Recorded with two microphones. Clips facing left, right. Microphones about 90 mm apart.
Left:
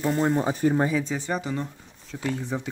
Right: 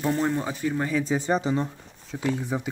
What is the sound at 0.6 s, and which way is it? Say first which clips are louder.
Speech: left 6 dB; 45° left (ahead or behind).